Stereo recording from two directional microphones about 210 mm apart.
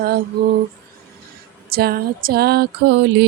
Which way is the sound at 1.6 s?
45° right (ahead or behind).